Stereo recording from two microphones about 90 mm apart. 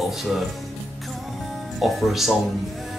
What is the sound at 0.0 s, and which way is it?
Speech, centre (ahead or behind).